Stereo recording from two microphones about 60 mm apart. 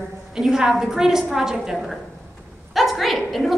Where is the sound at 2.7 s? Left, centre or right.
Centre.